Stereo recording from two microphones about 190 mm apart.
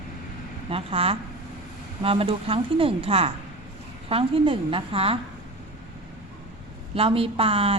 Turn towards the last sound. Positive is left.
turn(degrees=-30)  # may be behind; listen again after turning